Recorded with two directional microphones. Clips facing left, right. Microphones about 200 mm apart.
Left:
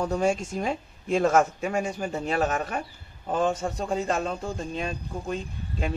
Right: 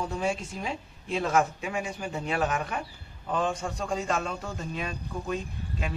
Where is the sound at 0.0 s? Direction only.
45° left (ahead or behind).